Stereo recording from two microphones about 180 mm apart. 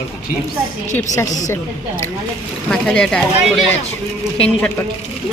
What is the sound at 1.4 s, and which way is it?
Speech, 20° left (ahead or behind).